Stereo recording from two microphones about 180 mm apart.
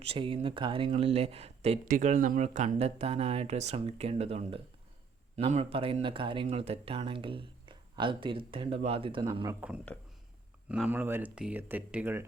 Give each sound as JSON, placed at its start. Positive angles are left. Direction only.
{"t": 0.0, "sound": "speech", "side_deg": -30}
{"t": 1.9, "sound": "speech", "side_deg": -45}
{"t": 9.6, "sound": "speech", "side_deg": -5}